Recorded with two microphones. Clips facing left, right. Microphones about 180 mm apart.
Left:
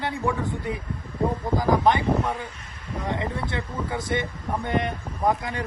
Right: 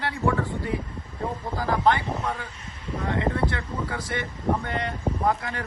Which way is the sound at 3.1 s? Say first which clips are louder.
Right 3 dB; 20° left (ahead or behind).